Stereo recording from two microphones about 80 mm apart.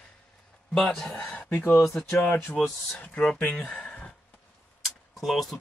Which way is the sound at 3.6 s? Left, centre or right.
Centre.